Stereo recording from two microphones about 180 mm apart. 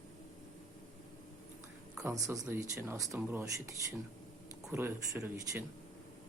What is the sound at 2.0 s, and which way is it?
Speech, 15° right (ahead or behind).